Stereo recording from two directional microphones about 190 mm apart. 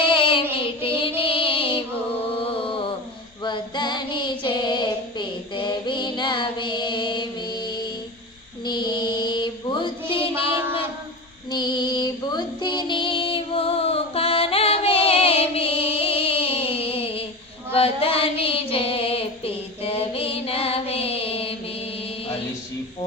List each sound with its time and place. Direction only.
0.1 s child singing: 25° left (ahead or behind)
0.8 s music: 30° left (ahead or behind)
1.2 s female singing: 25° left (ahead or behind)
2.5 s mantra: 30° left (ahead or behind)
3.4 s child singing: 25° left (ahead or behind)
8.6 s mantra: 25° left (ahead or behind)
11.5 s music: 20° left (ahead or behind)
17.7 s child singing: 30° left (ahead or behind)